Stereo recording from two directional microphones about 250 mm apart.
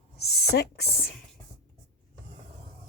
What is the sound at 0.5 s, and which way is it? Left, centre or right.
Speech, left.